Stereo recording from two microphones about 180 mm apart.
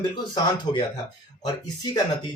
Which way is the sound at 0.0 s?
25° left (ahead or behind).